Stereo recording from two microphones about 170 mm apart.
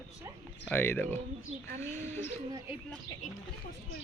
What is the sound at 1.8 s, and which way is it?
Bird, 10° left (ahead or behind).